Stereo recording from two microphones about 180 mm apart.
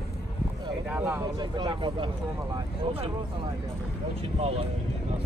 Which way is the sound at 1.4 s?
25° right (ahead or behind).